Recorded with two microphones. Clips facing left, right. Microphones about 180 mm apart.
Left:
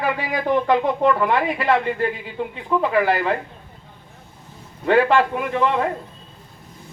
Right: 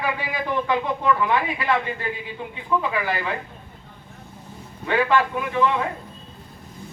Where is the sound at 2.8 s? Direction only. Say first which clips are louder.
Left 7 dB; 55° left (ahead or behind).